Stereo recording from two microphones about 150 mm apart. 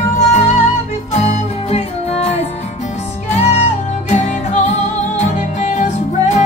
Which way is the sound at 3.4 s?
50° left (ahead or behind).